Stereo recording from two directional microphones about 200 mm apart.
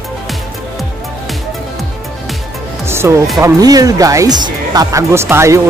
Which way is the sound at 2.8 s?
15° right (ahead or behind).